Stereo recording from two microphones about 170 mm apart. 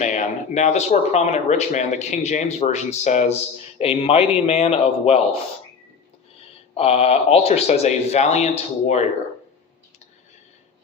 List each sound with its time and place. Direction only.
0.0 s speech: 45° left (ahead or behind)
6.7 s speech: 35° left (ahead or behind)